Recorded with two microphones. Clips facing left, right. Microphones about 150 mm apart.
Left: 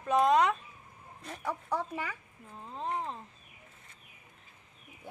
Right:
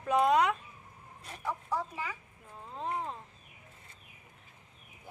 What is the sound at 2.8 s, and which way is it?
Speech, 5° right (ahead or behind).